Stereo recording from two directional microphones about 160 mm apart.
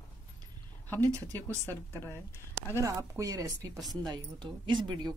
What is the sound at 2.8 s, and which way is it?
Speech, 20° right (ahead or behind).